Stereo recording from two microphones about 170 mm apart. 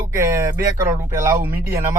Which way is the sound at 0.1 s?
20° right (ahead or behind).